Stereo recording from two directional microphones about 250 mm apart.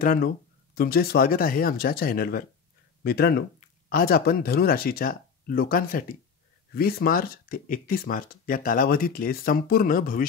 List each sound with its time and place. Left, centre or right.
0.0 s speech: left